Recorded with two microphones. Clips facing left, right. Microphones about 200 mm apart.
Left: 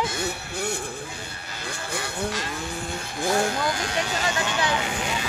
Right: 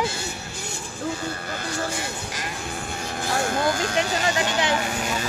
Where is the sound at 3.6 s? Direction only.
45° right (ahead or behind).